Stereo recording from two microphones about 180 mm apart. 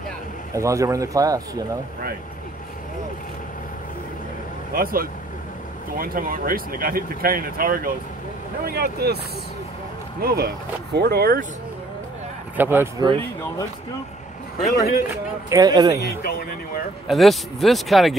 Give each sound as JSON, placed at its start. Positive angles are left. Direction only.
{"t": 0.6, "sound": "speech", "side_deg": -15}
{"t": 4.7, "sound": "speech", "side_deg": -55}
{"t": 10.2, "sound": "speech", "side_deg": -60}
{"t": 12.5, "sound": "speech", "side_deg": -10}
{"t": 13.0, "sound": "speech", "side_deg": -25}
{"t": 15.5, "sound": "speech", "side_deg": -25}
{"t": 16.0, "sound": "speech", "side_deg": 60}
{"t": 17.1, "sound": "speech", "side_deg": 0}